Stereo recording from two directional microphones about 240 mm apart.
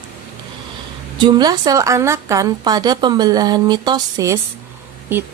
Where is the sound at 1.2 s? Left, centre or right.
Centre.